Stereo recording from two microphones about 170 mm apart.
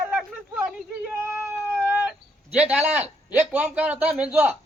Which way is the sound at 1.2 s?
15° right (ahead or behind).